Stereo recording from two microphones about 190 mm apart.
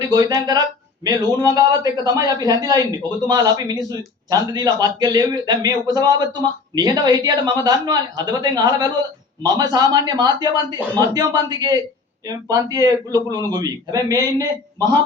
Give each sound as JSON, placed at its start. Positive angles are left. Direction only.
{"t": 0.0, "sound": "a man's voice", "side_deg": -20}